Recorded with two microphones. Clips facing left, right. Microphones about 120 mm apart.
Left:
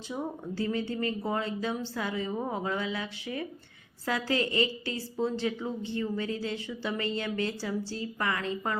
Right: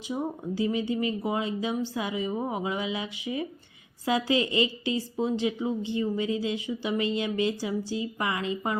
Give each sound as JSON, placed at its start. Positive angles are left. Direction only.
{"t": 0.1, "sound": "a woman's voice", "side_deg": -15}